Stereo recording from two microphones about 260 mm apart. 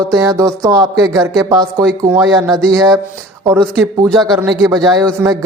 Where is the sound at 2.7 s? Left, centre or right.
Centre.